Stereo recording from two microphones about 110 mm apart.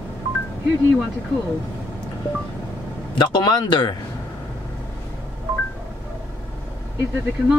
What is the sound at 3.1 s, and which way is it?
Speech, 45° left (ahead or behind).